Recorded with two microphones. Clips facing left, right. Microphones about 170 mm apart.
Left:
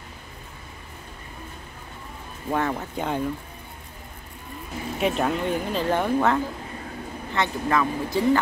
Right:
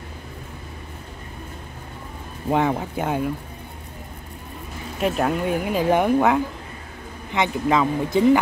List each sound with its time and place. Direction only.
2.5 s speech: 15° right (ahead or behind)
5.0 s speech: 5° right (ahead or behind); by 8.4 s 20° right (ahead or behind)